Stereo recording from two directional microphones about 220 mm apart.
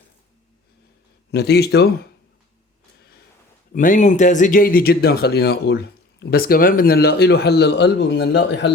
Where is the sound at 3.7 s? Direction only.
35° left (ahead or behind).